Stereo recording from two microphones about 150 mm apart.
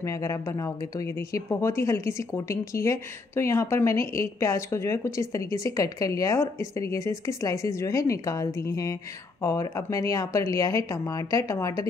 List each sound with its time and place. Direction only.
0.0 s a woman's voice: 20° left (ahead or behind)